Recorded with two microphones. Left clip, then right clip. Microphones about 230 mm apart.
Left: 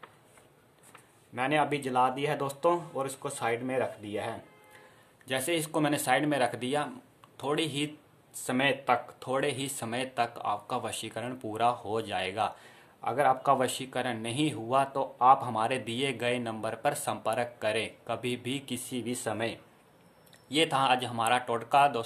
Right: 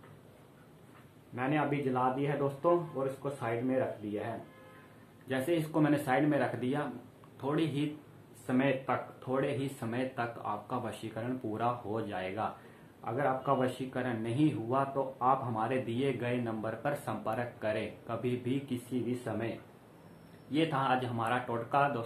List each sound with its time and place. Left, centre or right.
1.3 s speech: left
5.3 s speech: left
20.5 s speech: left